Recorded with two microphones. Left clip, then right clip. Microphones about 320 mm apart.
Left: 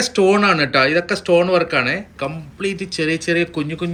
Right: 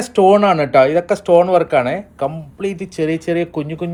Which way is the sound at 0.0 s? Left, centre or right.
Centre.